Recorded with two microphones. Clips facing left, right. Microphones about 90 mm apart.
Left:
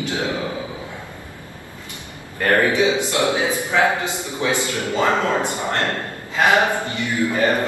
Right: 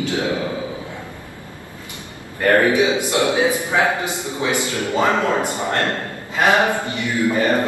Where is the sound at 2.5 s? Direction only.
20° right (ahead or behind).